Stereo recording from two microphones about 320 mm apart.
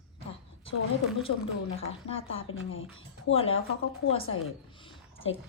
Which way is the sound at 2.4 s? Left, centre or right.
Left.